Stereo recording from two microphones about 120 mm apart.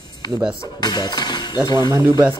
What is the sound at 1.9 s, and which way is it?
Speech, 20° right (ahead or behind).